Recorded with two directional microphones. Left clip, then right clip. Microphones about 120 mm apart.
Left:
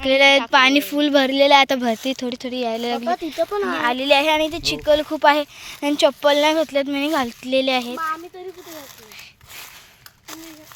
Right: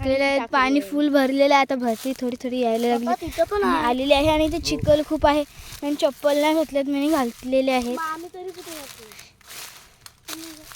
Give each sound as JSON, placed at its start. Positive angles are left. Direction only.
{"t": 0.0, "sound": "speech", "side_deg": 5}
{"t": 0.5, "sound": "speech", "side_deg": -10}
{"t": 2.4, "sound": "speech", "side_deg": -35}
{"t": 3.9, "sound": "speech", "side_deg": -35}
{"t": 5.2, "sound": "speech", "side_deg": -30}
{"t": 5.6, "sound": "speech", "side_deg": 10}
{"t": 6.4, "sound": "speech", "side_deg": -10}
{"t": 7.0, "sound": "speech", "side_deg": -30}
{"t": 7.7, "sound": "speech", "side_deg": -35}
{"t": 7.9, "sound": "speech", "side_deg": 55}